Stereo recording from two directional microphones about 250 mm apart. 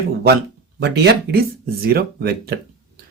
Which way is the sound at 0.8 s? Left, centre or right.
Right.